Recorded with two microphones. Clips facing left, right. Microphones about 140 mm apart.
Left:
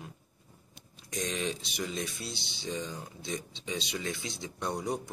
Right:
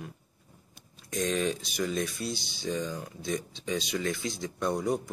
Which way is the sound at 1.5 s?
25° left (ahead or behind).